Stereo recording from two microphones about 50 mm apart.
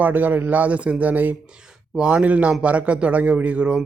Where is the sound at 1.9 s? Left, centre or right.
Right.